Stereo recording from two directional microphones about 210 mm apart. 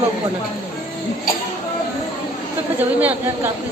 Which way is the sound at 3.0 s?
10° right (ahead or behind).